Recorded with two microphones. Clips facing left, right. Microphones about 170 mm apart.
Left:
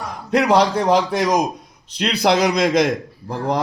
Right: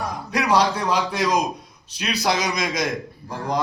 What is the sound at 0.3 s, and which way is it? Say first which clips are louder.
A man's voice: left 5 dB; 55° left (ahead or behind).